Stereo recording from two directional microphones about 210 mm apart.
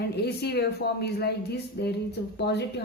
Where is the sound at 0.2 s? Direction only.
50° left (ahead or behind).